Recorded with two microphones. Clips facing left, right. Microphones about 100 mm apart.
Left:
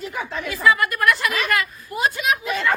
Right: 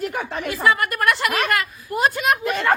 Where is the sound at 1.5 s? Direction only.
40° right (ahead or behind).